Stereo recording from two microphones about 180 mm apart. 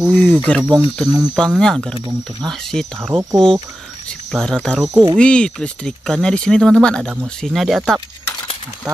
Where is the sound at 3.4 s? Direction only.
30° right (ahead or behind).